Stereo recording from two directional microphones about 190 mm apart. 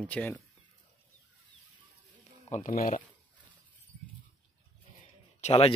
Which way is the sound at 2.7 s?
50° left (ahead or behind).